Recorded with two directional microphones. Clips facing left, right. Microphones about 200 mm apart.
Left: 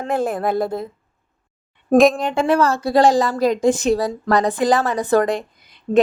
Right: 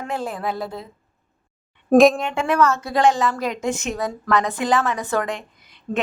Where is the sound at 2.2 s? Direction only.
35° left (ahead or behind).